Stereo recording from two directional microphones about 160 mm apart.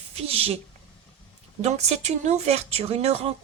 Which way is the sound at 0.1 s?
40° right (ahead or behind).